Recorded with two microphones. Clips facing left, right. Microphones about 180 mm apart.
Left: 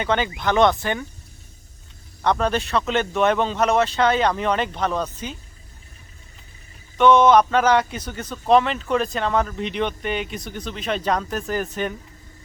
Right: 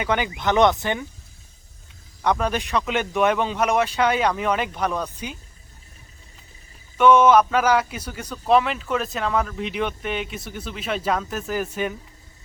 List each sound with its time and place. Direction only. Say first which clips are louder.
0.0 s speech: left 1 dB; 15° right (ahead or behind)
2.2 s a man's voice: left 1 dB; 10° right (ahead or behind)
6.9 s a man's voice: left 1 dB; 10° right (ahead or behind)